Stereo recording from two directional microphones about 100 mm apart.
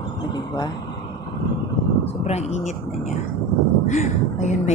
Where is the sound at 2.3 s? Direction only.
90° left.